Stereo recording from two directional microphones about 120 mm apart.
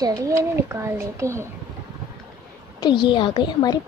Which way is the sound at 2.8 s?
40° left (ahead or behind).